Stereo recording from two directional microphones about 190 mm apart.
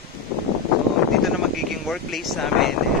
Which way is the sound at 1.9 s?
Centre (ahead or behind).